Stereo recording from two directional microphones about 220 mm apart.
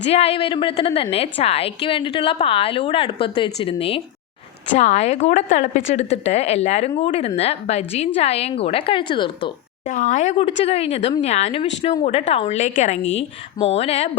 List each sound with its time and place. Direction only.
0.0 s a woman's voice: 25° left (ahead or behind)
9.8 s a woman's voice: 35° left (ahead or behind)